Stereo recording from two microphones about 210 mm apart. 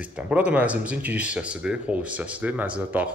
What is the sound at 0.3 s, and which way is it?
Speech, 5° right (ahead or behind).